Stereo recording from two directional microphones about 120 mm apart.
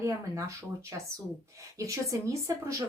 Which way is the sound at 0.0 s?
25° right (ahead or behind).